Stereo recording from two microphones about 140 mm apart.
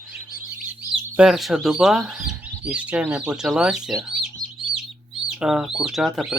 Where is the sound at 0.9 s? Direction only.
5° right (ahead or behind).